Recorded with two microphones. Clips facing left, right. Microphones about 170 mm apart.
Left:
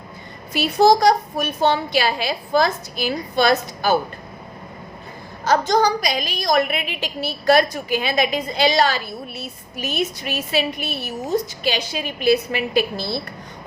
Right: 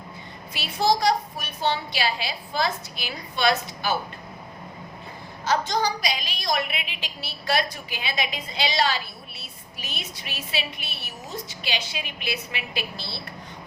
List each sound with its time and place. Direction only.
0.5 s a woman's voice: 45° left (ahead or behind)
5.5 s a woman's voice: 45° left (ahead or behind)